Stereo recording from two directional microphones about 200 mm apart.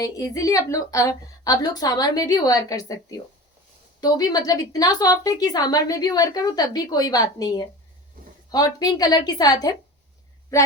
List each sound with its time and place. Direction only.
0.0 s a woman's voice: 15° left (ahead or behind)